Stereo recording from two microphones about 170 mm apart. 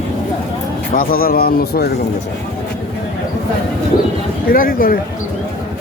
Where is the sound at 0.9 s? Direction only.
60° left (ahead or behind).